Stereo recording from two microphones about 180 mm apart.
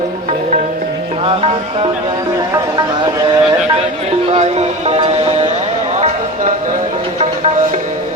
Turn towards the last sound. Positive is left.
turn(degrees=-40)  # may be behind; listen again after turning